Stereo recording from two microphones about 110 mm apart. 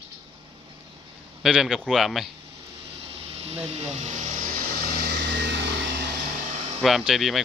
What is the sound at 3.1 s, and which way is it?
Speech, 65° right (ahead or behind).